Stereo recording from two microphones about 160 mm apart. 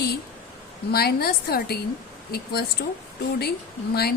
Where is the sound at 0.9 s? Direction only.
75° left (ahead or behind).